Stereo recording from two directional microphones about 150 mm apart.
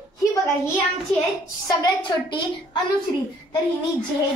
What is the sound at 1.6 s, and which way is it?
Speech, 25° left (ahead or behind).